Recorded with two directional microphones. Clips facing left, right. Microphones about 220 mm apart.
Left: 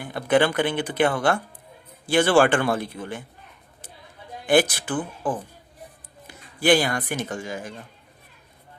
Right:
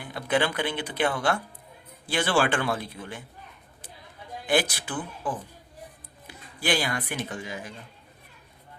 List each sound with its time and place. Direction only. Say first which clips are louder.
0.1 s speech: left 6 dB; 50° left (ahead or behind)
4.4 s speech: left 6 dB; 50° left (ahead or behind)